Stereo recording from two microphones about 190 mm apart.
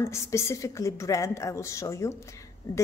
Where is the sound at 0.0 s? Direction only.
15° left (ahead or behind).